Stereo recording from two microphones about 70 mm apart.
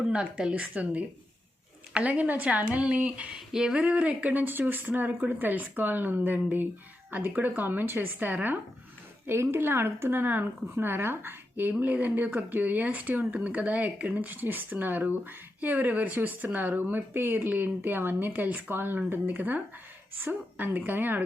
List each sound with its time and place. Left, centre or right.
0.0 s speech: centre
3.8 s a woman's voice: centre